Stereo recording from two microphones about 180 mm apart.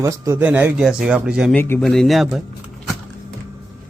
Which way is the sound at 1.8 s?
Centre (ahead or behind).